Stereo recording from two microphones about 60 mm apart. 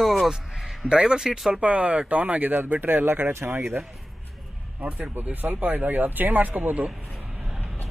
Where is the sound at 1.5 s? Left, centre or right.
Right.